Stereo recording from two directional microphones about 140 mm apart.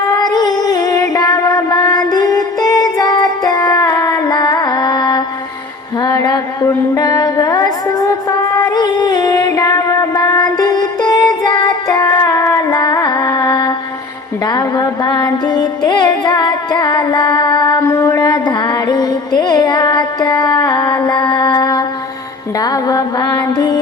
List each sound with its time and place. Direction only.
0.2 s music: 30° left (ahead or behind)
4.3 s carnatic music: 30° left (ahead or behind)
6.0 s music: 30° left (ahead or behind)
17.7 s music: 20° left (ahead or behind)
22.6 s mantra: 25° left (ahead or behind)